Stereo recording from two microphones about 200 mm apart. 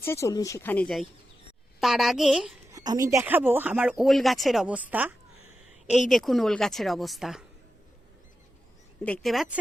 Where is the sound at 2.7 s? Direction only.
15° right (ahead or behind); by 7.5 s centre (ahead or behind).